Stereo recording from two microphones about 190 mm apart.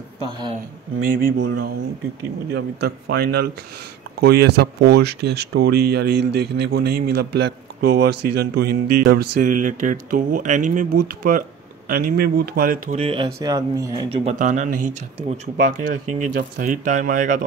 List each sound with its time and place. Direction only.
1.0 s speech: 45° right (ahead or behind)
2.5 s speech: 60° right (ahead or behind)
13.0 s speech: 25° right (ahead or behind)
14.0 s speech: 35° right (ahead or behind)